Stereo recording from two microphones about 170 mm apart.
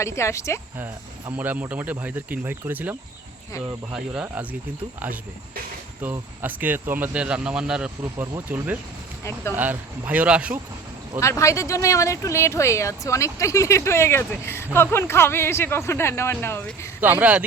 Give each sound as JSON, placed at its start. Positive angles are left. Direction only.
{"t": 0.0, "sound": "speech", "side_deg": 15}
{"t": 1.4, "sound": "speech", "side_deg": -10}
{"t": 6.0, "sound": "speech", "side_deg": -10}
{"t": 9.2, "sound": "speech", "side_deg": 15}
{"t": 9.6, "sound": "speech", "side_deg": -10}
{"t": 11.2, "sound": "speech", "side_deg": 15}
{"t": 17.0, "sound": "speech", "side_deg": -10}